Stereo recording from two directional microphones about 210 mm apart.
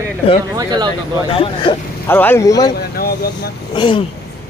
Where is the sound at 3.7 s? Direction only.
25° left (ahead or behind).